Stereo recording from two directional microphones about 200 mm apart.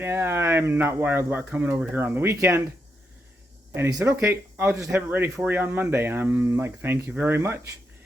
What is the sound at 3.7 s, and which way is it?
Speech, 10° right (ahead or behind).